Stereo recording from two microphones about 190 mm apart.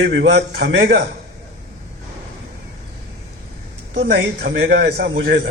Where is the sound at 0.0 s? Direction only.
65° right (ahead or behind).